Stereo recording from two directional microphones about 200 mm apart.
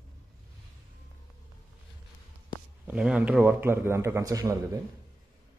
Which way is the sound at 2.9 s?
5° right (ahead or behind).